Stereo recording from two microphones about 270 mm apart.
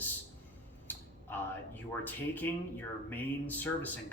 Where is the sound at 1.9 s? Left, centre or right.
Centre.